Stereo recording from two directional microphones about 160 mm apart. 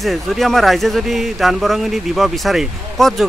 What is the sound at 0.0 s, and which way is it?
A man's voice, centre (ahead or behind).